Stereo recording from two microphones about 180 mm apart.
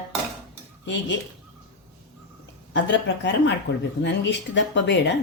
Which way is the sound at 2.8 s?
75° left (ahead or behind).